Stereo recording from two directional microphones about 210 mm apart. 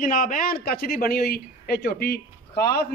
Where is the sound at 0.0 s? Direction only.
40° left (ahead or behind).